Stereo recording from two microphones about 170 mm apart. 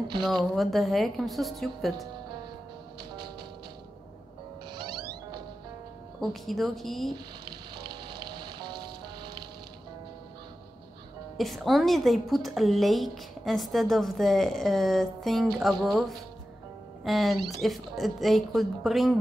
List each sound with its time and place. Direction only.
0.2 s a woman's voice: centre (ahead or behind)
4.7 s music: 25° right (ahead or behind)
6.2 s a woman's voice: centre (ahead or behind)
7.4 s music: 25° right (ahead or behind)
11.3 s a woman's voice: centre (ahead or behind)